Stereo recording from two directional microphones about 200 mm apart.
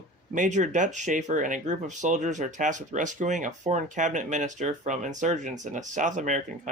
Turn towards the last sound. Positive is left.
turn(degrees=-40)  # may be behind; listen again after turning